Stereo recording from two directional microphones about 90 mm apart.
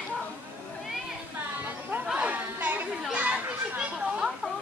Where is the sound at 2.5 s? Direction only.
20° right (ahead or behind).